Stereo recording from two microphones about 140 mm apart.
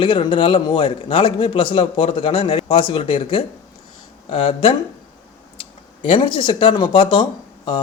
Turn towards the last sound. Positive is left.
turn(degrees=35)  # may be behind; listen again after turning